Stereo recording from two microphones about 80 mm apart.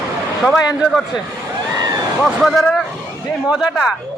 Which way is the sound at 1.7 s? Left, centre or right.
Right.